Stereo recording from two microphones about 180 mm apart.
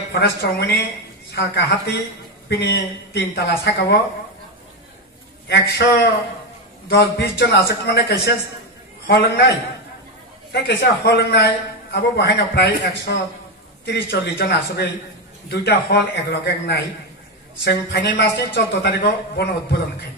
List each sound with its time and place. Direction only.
0.1 s a man's voice: 65° left (ahead or behind)
5.5 s a man's voice: 70° left (ahead or behind)
6.9 s a man's voice: 60° left (ahead or behind)
10.5 s a man's voice: 70° left (ahead or behind)